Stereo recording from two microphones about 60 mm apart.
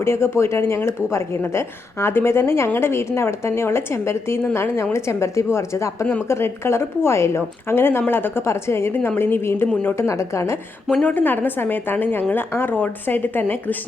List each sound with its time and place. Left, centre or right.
0.0 s speech: left
11.0 s speech: left